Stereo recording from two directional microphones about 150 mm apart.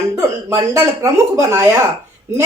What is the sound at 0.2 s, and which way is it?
Speech, 20° right (ahead or behind).